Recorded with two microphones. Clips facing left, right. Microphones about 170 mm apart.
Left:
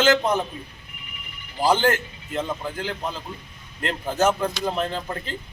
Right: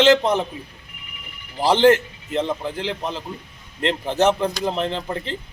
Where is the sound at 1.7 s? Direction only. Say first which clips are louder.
Right 6 dB; 25° right (ahead or behind).